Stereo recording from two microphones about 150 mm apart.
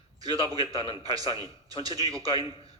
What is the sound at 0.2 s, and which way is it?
A man's voice, 25° right (ahead or behind).